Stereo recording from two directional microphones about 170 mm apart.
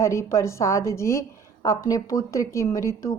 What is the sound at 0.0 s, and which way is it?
A woman's voice, 15° left (ahead or behind).